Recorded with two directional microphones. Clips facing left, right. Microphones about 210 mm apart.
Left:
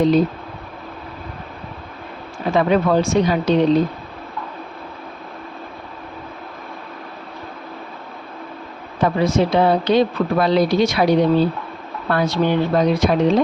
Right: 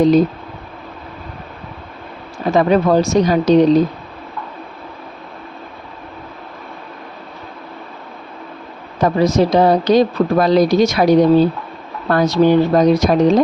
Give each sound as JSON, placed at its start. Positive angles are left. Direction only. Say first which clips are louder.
{"t": 2.5, "sound": "speech", "louder": "right 3 dB", "side_deg": -40}
{"t": 9.0, "sound": "speech", "louder": "right 3 dB", "side_deg": -40}